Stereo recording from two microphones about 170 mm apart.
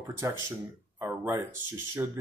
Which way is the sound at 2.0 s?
15° right (ahead or behind).